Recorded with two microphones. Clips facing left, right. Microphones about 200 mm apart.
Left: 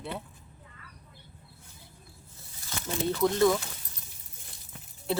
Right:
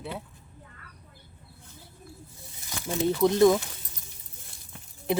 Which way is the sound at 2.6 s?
25° right (ahead or behind).